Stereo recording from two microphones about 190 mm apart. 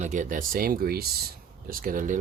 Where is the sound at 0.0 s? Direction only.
40° right (ahead or behind).